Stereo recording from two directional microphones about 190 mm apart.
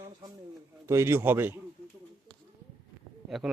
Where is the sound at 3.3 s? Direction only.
Centre (ahead or behind).